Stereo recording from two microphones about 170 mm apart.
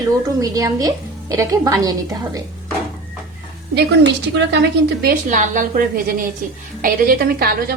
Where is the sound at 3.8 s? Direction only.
85° right.